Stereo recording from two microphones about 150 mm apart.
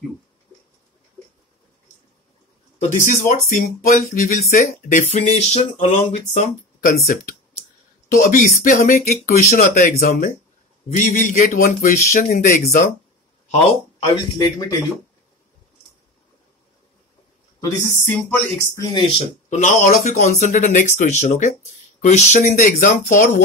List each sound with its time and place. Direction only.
2.8 s speech: 60° left (ahead or behind); by 5.0 s 75° left (ahead or behind)
5.1 s speech: 45° left (ahead or behind)
8.1 s speech: 65° left (ahead or behind)
10.9 s speech: 50° left (ahead or behind); by 12.6 s 70° left (ahead or behind)
13.5 s a sound: 45° left (ahead or behind)
14.1 s speech: 30° left (ahead or behind)
17.6 s speech: 20° left (ahead or behind)
19.6 s speech: 55° left (ahead or behind)
22.7 s speech: 70° left (ahead or behind)